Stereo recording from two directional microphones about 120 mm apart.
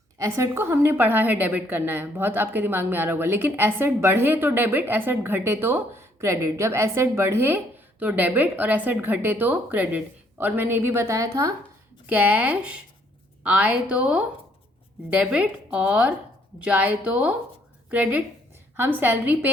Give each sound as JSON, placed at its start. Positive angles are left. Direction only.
{"t": 0.2, "sound": "a woman's voice", "side_deg": -25}
{"t": 12.0, "sound": "a woman's voice", "side_deg": -10}